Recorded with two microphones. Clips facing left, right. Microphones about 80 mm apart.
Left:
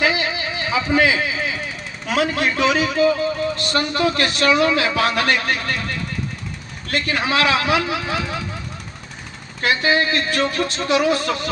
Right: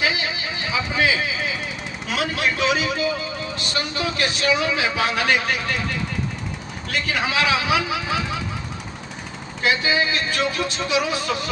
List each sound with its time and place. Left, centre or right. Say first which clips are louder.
0.0 s a sound: left 4 dB; left
2.0 s speech: left 4 dB; left
6.9 s speech: left 3 dB; left
9.6 s speech: left 2 dB; left